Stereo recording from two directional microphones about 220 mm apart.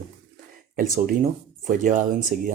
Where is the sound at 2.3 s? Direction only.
40° right (ahead or behind).